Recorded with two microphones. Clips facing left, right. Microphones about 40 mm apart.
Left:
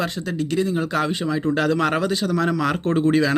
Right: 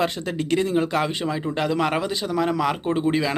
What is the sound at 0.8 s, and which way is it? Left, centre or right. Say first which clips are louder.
Speech: even; right.